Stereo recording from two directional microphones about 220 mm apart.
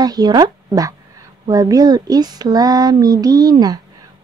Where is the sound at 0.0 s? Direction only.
20° right (ahead or behind).